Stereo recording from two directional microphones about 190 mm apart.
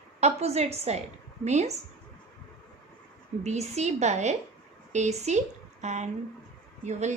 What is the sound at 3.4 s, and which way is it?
A woman's voice, 35° right (ahead or behind).